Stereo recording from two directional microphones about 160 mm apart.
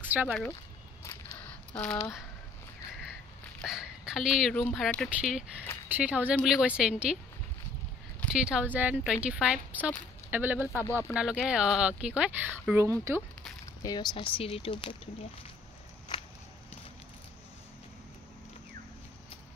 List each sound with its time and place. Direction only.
0.1 s speech: 10° right (ahead or behind)
1.0 s a sound: 10° left (ahead or behind)
3.6 s speech: 5° right (ahead or behind)
8.3 s speech: 5° right (ahead or behind)
12.8 s speech: 20° right (ahead or behind)
13.8 s speech: 30° left (ahead or behind)